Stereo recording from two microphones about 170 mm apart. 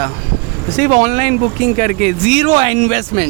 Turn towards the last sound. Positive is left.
turn(degrees=-40)  # may be behind; listen again after turning